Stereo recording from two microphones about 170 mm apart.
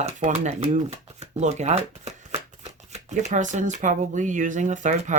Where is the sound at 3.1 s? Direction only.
45° right (ahead or behind).